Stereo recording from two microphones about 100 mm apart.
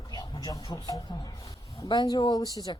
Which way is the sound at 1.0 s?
45° left (ahead or behind).